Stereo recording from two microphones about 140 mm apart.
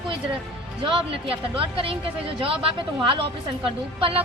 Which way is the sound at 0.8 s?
40° right (ahead or behind).